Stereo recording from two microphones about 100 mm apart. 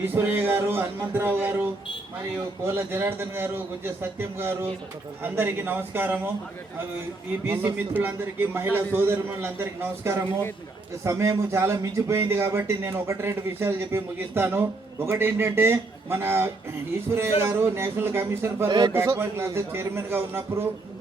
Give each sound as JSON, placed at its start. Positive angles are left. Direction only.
{"t": 0.0, "sound": "a man's voice", "side_deg": -20}
{"t": 7.8, "sound": "a man's voice", "side_deg": -20}